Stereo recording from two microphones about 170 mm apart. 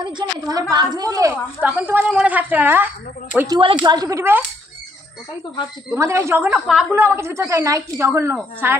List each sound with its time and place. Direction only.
0.0 s speech: 25° right (ahead or behind)
1.3 s speech: 10° right (ahead or behind)
3.3 s speech: 25° right (ahead or behind)
5.9 s speech: 15° right (ahead or behind)